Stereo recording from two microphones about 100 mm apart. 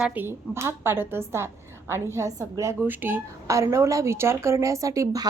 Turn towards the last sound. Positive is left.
turn(degrees=-35)  # may be behind; listen again after turning